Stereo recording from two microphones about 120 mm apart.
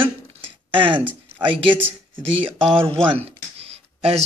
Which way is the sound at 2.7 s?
50° right (ahead or behind).